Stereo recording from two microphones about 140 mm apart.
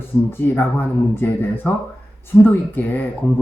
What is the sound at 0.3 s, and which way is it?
Speech, 15° left (ahead or behind).